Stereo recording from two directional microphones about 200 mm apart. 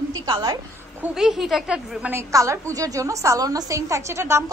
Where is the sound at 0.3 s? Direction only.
20° right (ahead or behind).